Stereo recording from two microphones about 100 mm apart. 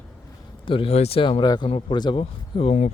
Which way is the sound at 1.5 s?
50° left (ahead or behind).